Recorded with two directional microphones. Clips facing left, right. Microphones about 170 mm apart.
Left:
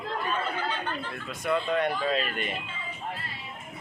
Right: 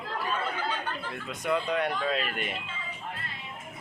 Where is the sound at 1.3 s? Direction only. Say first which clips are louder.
Left 1 dB; 15° right (ahead or behind).